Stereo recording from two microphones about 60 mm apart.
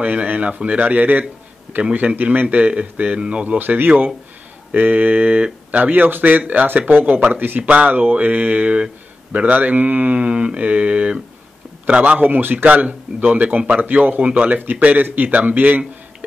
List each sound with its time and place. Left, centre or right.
0.0 s a man's voice: right
3.5 s a man's voice: right